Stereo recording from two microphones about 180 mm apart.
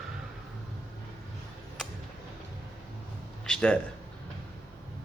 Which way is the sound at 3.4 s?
5° left (ahead or behind).